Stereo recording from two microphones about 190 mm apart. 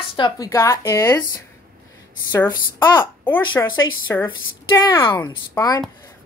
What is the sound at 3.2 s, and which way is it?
A woman's voice, 10° left (ahead or behind).